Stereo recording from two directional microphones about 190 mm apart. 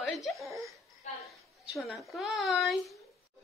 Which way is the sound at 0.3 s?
Centre (ahead or behind).